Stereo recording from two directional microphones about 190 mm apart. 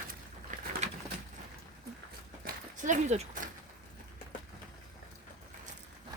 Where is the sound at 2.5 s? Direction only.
40° right (ahead or behind).